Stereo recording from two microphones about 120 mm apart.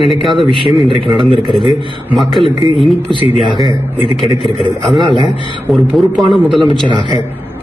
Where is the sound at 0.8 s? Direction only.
45° right (ahead or behind).